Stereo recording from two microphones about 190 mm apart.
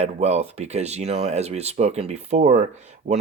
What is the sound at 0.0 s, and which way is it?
Speech, 35° right (ahead or behind).